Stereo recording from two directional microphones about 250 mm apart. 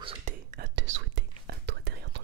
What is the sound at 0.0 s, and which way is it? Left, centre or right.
Whispering, right.